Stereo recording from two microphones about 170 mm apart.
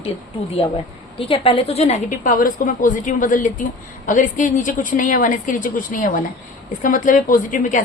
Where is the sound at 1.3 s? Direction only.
35° left (ahead or behind).